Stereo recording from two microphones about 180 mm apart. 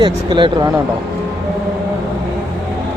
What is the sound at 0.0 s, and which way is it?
Speech, 25° right (ahead or behind).